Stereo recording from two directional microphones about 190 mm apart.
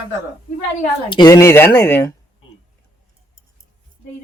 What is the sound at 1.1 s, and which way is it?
Speech, 20° left (ahead or behind).